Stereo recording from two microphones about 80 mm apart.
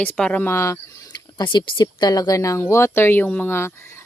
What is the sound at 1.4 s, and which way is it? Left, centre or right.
A woman's voice, left.